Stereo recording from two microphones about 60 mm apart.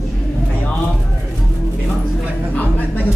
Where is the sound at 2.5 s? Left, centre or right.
Left.